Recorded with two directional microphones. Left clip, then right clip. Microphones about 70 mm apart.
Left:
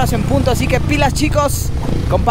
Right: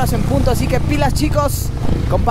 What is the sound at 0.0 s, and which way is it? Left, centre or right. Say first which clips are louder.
Speech: left 2 dB; left.